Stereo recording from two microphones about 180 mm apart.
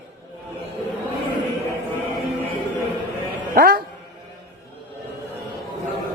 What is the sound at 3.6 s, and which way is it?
Speech, 55° right (ahead or behind).